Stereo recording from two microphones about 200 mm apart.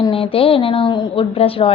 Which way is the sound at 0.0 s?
25° left (ahead or behind).